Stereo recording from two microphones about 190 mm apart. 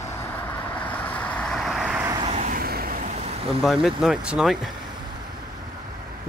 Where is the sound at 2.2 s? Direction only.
35° right (ahead or behind).